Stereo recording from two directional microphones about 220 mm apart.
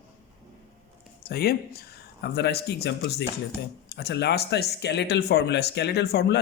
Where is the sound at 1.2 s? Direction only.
45° left (ahead or behind).